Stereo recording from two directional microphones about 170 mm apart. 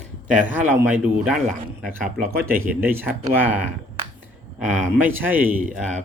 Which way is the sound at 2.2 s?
15° right (ahead or behind).